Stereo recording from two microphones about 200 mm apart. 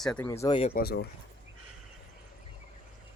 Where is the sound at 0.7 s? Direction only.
55° left (ahead or behind).